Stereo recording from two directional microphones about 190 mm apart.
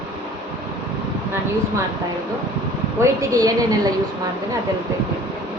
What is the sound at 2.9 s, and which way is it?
Speech, 20° right (ahead or behind).